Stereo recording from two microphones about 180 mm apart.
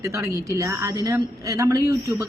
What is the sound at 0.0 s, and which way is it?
A woman's voice, 15° right (ahead or behind).